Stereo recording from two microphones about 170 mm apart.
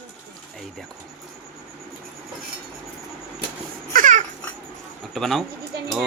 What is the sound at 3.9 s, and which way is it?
Babbling, 50° right (ahead or behind).